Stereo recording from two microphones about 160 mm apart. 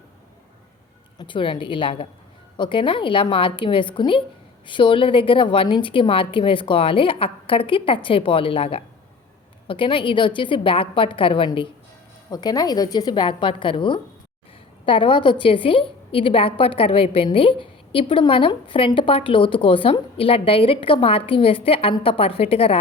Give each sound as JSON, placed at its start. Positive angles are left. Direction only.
{"t": 1.2, "sound": "a woman's voice", "side_deg": 30}